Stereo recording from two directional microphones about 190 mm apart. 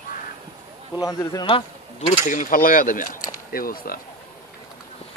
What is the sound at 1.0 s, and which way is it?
Speech, 20° left (ahead or behind).